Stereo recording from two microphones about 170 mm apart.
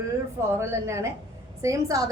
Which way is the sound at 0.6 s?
15° right (ahead or behind).